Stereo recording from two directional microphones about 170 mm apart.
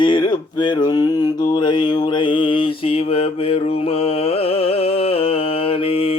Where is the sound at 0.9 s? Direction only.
20° left (ahead or behind).